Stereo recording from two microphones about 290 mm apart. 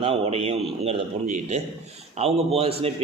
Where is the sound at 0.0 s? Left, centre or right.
Centre.